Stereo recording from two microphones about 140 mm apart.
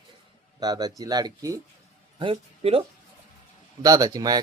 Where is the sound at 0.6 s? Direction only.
30° right (ahead or behind).